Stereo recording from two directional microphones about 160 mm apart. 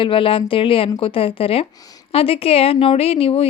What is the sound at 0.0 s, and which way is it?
A woman's voice, 35° left (ahead or behind).